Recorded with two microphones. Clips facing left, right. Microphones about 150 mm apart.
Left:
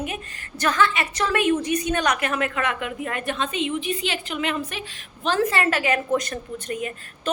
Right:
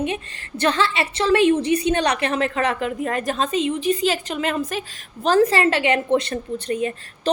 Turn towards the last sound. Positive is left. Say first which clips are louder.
# right 6 dB
turn(degrees=-30)  # may be behind; listen again after turning